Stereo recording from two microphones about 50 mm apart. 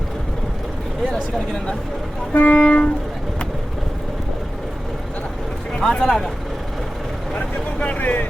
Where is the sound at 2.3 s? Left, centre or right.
Left.